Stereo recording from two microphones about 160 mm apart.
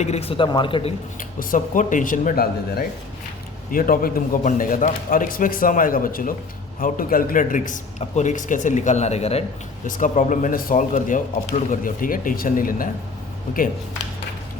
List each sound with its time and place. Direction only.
0.0 s a man's voice: 40° left (ahead or behind)
1.4 s a man's voice: 60° left (ahead or behind); by 9.4 s 40° left (ahead or behind)
9.8 s speech: 55° left (ahead or behind)